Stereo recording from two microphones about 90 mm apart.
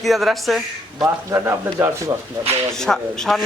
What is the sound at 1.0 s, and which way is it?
Speech, 30° right (ahead or behind).